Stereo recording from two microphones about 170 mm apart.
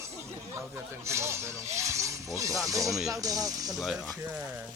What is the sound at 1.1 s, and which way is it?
Speech, 15° right (ahead or behind).